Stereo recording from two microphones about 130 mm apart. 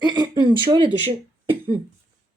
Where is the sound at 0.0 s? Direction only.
35° right (ahead or behind).